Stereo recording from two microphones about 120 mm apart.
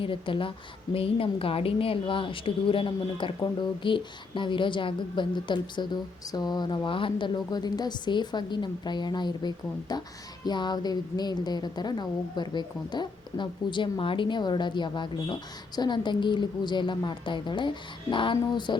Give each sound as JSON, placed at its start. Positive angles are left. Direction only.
{"t": 0.0, "sound": "a woman's voice", "side_deg": 45}